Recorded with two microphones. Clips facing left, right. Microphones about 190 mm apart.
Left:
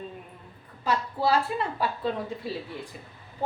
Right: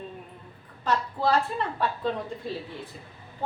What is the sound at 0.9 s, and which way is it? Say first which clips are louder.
A woman's voice: even; 10° left (ahead or behind).